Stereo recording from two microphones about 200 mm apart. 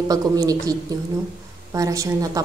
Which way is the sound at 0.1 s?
20° right (ahead or behind).